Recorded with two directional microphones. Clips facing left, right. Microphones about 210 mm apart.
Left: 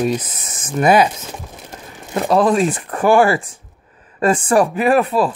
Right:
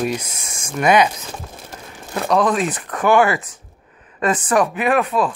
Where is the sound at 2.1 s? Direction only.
20° left (ahead or behind).